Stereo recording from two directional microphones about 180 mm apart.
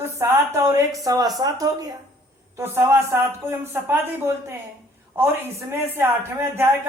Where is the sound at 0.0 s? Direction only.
15° right (ahead or behind).